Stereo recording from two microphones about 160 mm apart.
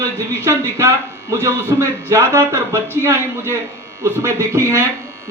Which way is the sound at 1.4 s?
15° right (ahead or behind).